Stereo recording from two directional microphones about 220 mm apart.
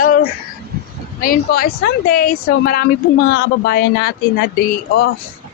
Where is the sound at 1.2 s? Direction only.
40° left (ahead or behind).